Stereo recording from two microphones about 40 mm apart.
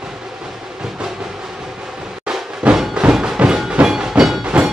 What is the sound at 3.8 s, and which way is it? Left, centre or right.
Music, centre.